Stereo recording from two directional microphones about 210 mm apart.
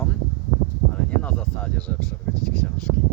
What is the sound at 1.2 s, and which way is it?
Speech, 5° left (ahead or behind).